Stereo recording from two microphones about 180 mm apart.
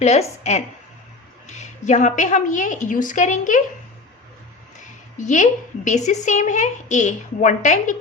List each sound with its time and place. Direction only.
0.0 s a woman's voice: 40° left (ahead or behind)
5.1 s speech: 45° left (ahead or behind)